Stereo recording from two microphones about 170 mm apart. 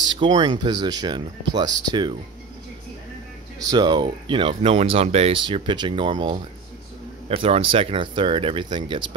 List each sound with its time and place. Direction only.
0.1 s speech: 25° right (ahead or behind)
3.7 s speech: 25° right (ahead or behind)